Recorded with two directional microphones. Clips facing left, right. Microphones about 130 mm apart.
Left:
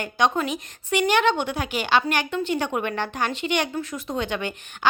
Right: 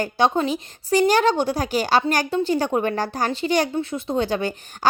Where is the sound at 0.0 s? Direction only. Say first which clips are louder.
Right 3 dB; 30° right (ahead or behind).